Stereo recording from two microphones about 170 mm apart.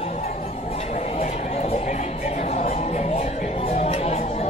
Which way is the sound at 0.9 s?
45° left (ahead or behind).